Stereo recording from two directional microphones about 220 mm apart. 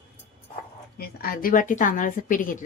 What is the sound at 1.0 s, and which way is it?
A woman's voice, 40° left (ahead or behind).